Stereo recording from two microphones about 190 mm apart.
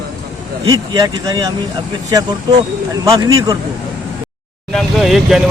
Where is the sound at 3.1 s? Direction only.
20° right (ahead or behind).